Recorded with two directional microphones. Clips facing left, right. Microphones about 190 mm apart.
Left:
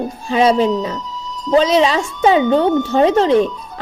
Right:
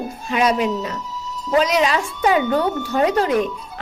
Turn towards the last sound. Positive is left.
turn(degrees=25)  # may be behind; listen again after turning